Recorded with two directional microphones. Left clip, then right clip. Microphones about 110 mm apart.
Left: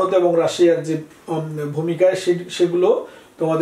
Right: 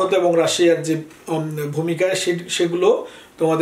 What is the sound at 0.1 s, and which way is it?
Speech, 20° right (ahead or behind).